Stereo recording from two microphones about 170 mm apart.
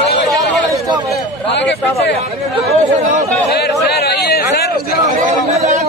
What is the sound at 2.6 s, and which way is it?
Speech, 45° right (ahead or behind).